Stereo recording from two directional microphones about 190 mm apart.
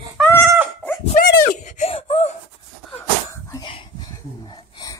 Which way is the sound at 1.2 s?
55° left (ahead or behind).